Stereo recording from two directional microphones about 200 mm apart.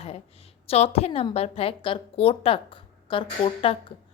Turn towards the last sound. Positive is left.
turn(degrees=25)  # may be behind; listen again after turning